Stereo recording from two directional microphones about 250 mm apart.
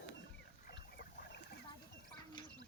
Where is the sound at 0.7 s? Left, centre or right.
Left.